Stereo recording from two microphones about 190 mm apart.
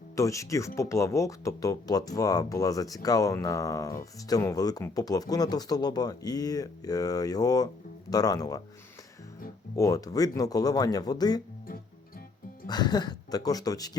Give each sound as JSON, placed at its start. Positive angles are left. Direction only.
{"t": 0.2, "sound": "speech", "side_deg": 15}
{"t": 9.7, "sound": "speech", "side_deg": 20}
{"t": 12.6, "sound": "speech", "side_deg": 20}